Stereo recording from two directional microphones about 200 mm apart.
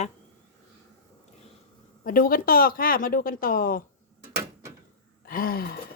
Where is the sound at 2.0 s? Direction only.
45° left (ahead or behind).